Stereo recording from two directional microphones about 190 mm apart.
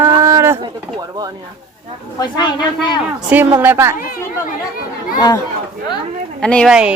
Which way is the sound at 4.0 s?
45° left (ahead or behind).